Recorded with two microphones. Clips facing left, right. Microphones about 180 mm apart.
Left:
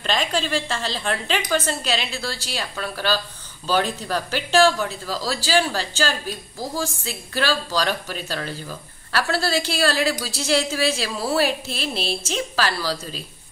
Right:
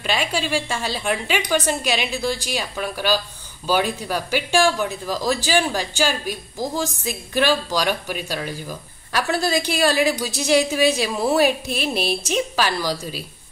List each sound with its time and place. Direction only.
0.0 s speech: 10° right (ahead or behind)